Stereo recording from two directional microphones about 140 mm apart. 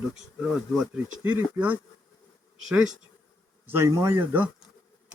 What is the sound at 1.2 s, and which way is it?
A man's voice, 15° right (ahead or behind).